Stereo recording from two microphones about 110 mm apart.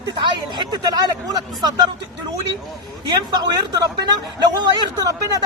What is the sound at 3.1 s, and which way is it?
A man's voice, 40° right (ahead or behind).